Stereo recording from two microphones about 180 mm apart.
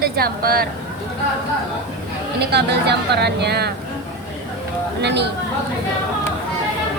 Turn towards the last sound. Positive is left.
turn(degrees=-70)  # may be behind; listen again after turning